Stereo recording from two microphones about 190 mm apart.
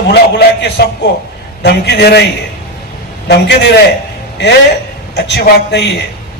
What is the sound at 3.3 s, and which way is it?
Speech, 65° left (ahead or behind).